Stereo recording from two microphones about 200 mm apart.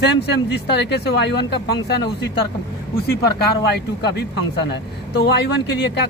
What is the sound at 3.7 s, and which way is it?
Speech, 55° left (ahead or behind).